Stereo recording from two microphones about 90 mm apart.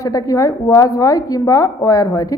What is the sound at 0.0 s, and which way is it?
A man's voice, 40° left (ahead or behind).